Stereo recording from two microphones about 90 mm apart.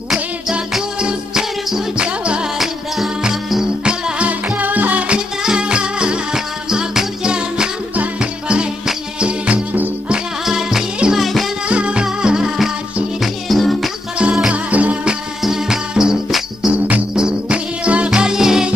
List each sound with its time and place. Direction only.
0.1 s music: 10° right (ahead or behind)
11.7 s music: 10° right (ahead or behind)
15.4 s insect: 5° right (ahead or behind)
16.7 s music: 15° right (ahead or behind)